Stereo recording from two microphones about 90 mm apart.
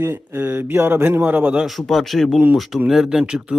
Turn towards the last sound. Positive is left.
turn(degrees=-10)  # may be behind; listen again after turning